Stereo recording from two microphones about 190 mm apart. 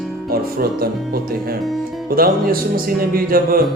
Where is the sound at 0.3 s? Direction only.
50° right (ahead or behind).